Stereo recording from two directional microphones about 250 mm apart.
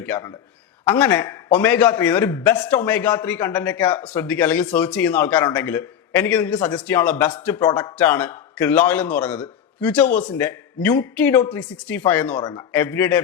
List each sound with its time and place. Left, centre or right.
0.0 s a man's voice: centre